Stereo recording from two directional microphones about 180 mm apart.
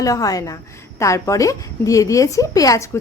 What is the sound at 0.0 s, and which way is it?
A woman's voice, 20° left (ahead or behind).